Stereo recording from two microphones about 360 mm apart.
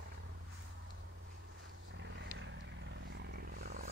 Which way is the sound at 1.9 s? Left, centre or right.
Right.